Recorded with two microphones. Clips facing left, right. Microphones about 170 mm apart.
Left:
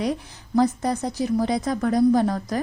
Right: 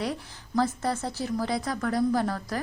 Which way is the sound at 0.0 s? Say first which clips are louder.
Left 6 dB; 20° left (ahead or behind).